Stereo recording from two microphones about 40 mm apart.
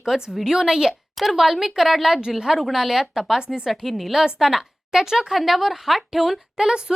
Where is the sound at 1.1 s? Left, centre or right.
Centre.